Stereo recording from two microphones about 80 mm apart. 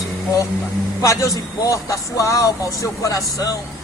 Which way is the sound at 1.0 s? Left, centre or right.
Left.